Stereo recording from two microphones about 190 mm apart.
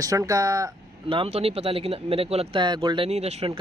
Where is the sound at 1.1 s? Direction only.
30° right (ahead or behind).